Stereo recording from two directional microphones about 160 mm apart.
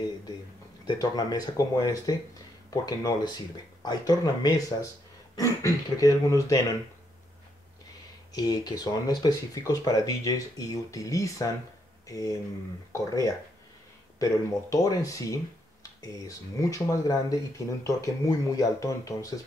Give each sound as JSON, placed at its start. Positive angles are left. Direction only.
{"t": 0.8, "sound": "speech", "side_deg": 25}
{"t": 8.3, "sound": "speech", "side_deg": 25}